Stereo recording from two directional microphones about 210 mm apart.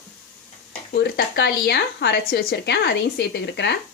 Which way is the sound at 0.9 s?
50° left (ahead or behind).